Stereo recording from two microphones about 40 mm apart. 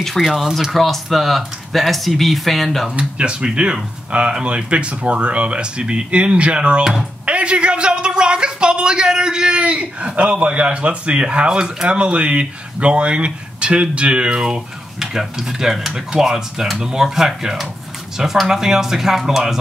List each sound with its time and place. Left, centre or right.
0.2 s speech: centre
2.9 s a man's voice: right; by 19.5 s centre